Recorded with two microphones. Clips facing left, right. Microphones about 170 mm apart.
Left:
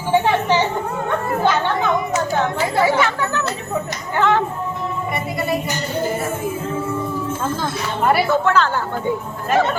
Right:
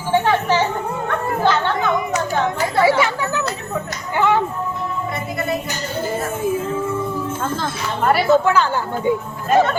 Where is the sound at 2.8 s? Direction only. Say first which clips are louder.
Right 2 dB; 10° right (ahead or behind).